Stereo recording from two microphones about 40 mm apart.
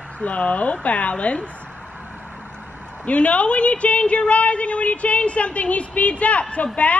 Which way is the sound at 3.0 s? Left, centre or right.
Left.